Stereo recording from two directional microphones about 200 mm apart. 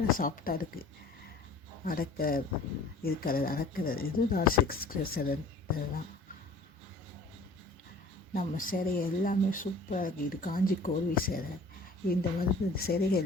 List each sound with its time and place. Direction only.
0.2 s speech: 45° left (ahead or behind)
8.3 s speech: 45° left (ahead or behind)